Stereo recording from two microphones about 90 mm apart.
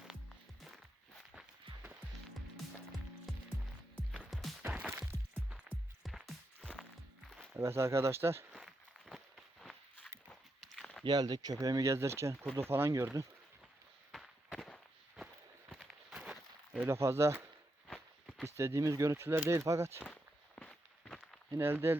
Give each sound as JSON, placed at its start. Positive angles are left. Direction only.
{"t": 3.3, "sound": "music", "side_deg": 0}
{"t": 4.7, "sound": "music", "side_deg": -10}
{"t": 6.0, "sound": "music", "side_deg": 0}
{"t": 7.5, "sound": "speech", "side_deg": -30}
{"t": 8.5, "sound": "walk", "side_deg": 0}
{"t": 11.0, "sound": "speech", "side_deg": -50}
{"t": 11.9, "sound": "speech", "side_deg": -30}
{"t": 14.1, "sound": "fireworks", "side_deg": 0}
{"t": 15.8, "sound": "a sound", "side_deg": -5}
{"t": 16.9, "sound": "speech", "side_deg": -30}
{"t": 17.8, "sound": "walk", "side_deg": 5}
{"t": 18.4, "sound": "speech", "side_deg": -30}
{"t": 20.6, "sound": "walk", "side_deg": 5}
{"t": 21.5, "sound": "speech", "side_deg": -25}